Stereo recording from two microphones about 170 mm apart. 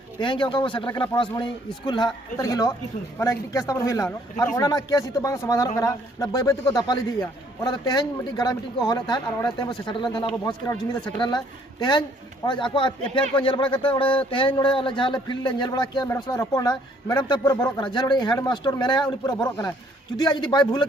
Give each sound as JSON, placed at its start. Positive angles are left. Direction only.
{"t": 0.2, "sound": "speech", "side_deg": 30}
{"t": 20.1, "sound": "speech", "side_deg": 25}